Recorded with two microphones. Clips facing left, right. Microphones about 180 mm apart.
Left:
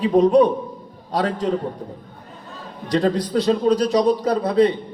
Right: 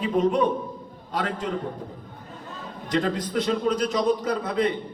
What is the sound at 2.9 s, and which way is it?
A man's voice, 35° left (ahead or behind).